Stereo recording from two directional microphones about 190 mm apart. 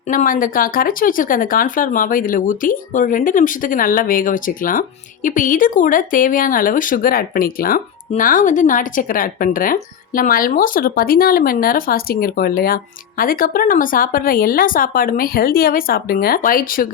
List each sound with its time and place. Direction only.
0.1 s speech: 45° left (ahead or behind)